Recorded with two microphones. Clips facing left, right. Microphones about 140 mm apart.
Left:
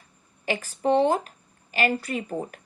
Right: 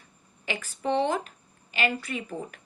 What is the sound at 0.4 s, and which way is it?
Speech, 40° left (ahead or behind).